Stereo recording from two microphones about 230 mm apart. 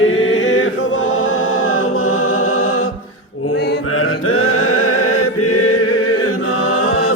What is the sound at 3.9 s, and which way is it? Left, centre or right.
Mantra, left.